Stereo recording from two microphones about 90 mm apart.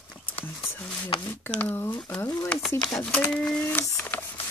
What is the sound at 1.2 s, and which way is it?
Speech, 25° left (ahead or behind).